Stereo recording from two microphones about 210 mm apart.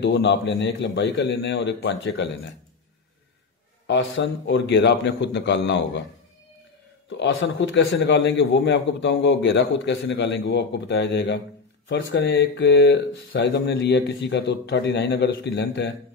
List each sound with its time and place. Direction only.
0.0 s a man's voice: 55° left (ahead or behind)
3.8 s a man's voice: 60° left (ahead or behind)
7.1 s a man's voice: 60° left (ahead or behind)